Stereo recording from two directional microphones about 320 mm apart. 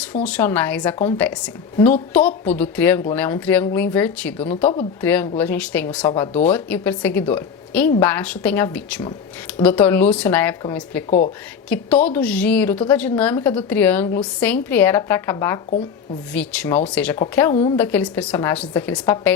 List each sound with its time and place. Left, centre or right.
0.0 s a woman's voice: centre
17.5 s a woman's voice: centre
17.7 s a woman's voice: centre